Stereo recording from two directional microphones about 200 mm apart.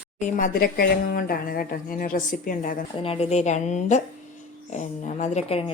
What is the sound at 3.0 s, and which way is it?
A woman's voice, 30° left (ahead or behind).